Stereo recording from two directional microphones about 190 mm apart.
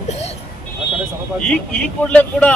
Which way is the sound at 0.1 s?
35° left (ahead or behind).